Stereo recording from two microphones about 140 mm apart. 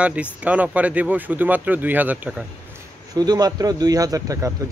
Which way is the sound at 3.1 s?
30° right (ahead or behind).